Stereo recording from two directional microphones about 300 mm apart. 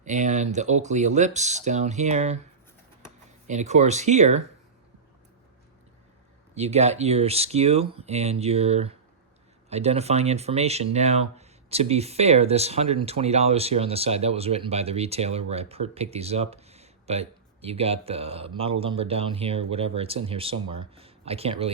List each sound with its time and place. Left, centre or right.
0.0 s speech: right
3.4 s speech: right
6.5 s speech: right